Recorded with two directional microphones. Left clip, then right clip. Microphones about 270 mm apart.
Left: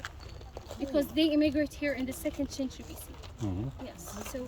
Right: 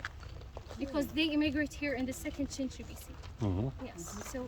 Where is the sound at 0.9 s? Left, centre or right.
Centre.